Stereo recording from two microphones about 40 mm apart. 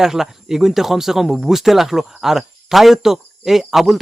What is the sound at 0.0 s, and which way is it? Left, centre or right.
Speech, centre.